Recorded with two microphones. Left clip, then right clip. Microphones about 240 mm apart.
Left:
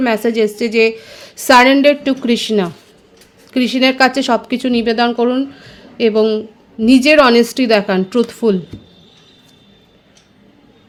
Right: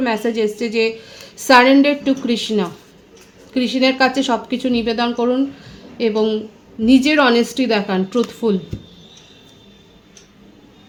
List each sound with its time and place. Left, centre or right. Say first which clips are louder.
0.0 s a woman's voice: left 4 dB; left